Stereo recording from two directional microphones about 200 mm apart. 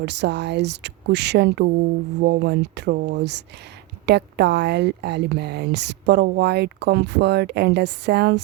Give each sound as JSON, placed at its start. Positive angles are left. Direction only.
{"t": 0.0, "sound": "a woman's voice", "side_deg": -60}